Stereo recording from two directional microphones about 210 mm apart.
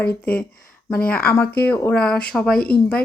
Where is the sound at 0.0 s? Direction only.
50° left (ahead or behind).